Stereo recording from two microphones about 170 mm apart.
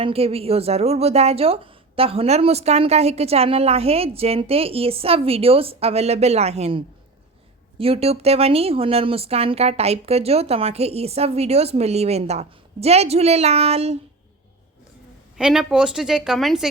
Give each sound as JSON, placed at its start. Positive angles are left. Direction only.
{"t": 0.0, "sound": "speech", "side_deg": -35}
{"t": 15.4, "sound": "a woman's voice", "side_deg": -5}